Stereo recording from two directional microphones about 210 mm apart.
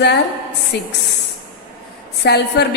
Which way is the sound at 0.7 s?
55° left (ahead or behind).